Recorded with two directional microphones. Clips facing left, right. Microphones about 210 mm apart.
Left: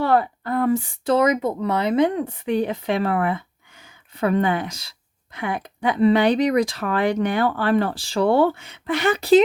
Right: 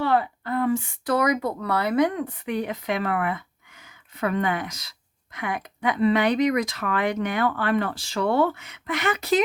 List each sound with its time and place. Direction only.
0.0 s speech: 45° left (ahead or behind)